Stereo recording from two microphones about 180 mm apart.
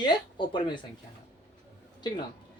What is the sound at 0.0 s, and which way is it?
Speech, 25° left (ahead or behind).